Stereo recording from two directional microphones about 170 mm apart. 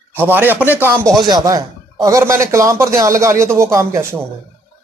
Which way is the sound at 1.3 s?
20° right (ahead or behind).